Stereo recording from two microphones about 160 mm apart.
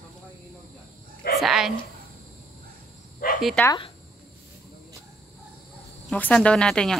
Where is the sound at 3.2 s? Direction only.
65° left (ahead or behind).